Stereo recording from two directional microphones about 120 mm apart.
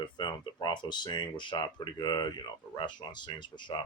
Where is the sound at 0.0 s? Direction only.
40° left (ahead or behind).